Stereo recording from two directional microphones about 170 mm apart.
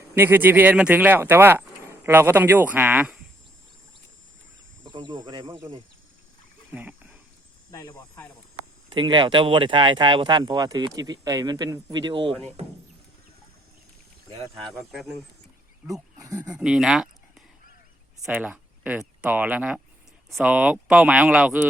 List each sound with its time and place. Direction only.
0.1 s speech: 10° right (ahead or behind)
4.9 s speech: 30° right (ahead or behind)
6.7 s a sound: 10° right (ahead or behind)
7.7 s speech: 15° left (ahead or behind)
8.9 s speech: 30° right (ahead or behind)
14.3 s speech: 20° right (ahead or behind)
14.9 s speech: centre (ahead or behind)
15.9 s speech: 20° right (ahead or behind)
16.5 s speech: 5° right (ahead or behind)